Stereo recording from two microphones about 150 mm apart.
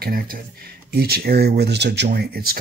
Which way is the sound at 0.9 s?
90° right.